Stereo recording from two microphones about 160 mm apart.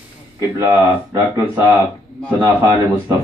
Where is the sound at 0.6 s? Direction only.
20° right (ahead or behind).